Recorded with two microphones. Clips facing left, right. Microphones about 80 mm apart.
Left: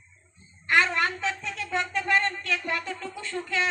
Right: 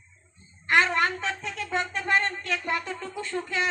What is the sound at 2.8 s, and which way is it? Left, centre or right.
Music, right.